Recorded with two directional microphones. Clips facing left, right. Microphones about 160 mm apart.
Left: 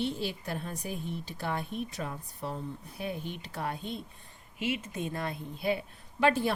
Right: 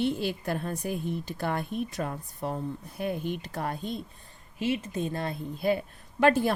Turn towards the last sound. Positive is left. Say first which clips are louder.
# right 4 dB
turn(degrees=-45)  # may be behind; listen again after turning